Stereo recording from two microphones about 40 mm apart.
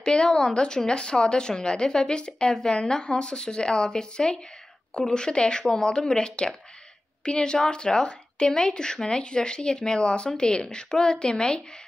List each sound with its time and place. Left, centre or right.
0.0 s a woman's voice: left